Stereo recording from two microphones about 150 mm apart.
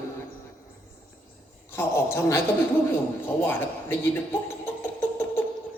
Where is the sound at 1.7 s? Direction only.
15° left (ahead or behind).